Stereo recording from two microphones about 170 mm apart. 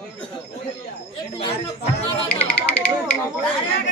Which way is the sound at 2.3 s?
10° left (ahead or behind).